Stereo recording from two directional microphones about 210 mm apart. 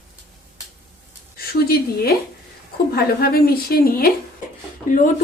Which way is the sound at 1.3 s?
45° left (ahead or behind).